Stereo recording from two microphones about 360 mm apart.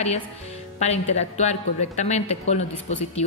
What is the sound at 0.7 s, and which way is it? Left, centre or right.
Speech, centre.